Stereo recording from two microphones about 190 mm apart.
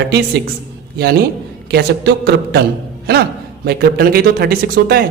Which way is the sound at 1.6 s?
60° right (ahead or behind).